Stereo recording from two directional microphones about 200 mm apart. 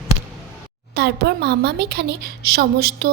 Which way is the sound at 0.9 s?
55° right (ahead or behind).